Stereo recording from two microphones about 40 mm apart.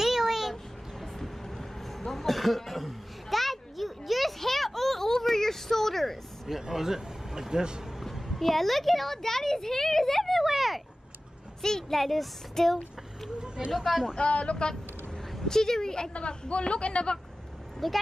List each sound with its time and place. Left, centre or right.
0.0 s a sound: centre
1.0 s a sound: centre
6.7 s speech: centre
8.0 s speech: centre
10.4 s a sound: centre
11.9 s speech: centre
13.6 s speech: centre
14.1 s speech: left
15.4 s speech: centre
16.1 s speech: left
17.8 s speech: centre